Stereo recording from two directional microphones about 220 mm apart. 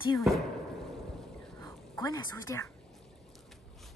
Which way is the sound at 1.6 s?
15° left (ahead or behind).